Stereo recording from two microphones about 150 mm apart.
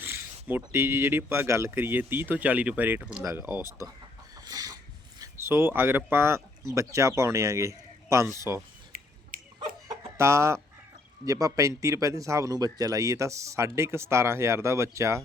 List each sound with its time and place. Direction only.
0.0 s speech: 15° right (ahead or behind)
4.4 s chicken: 25° right (ahead or behind)
5.2 s a sound: 15° right (ahead or behind)
6.1 s a man's voice: 15° right (ahead or behind)
8.9 s a sound: 75° right (ahead or behind)
9.3 s chicken: 65° right (ahead or behind)
10.0 s a man's voice: 20° right (ahead or behind)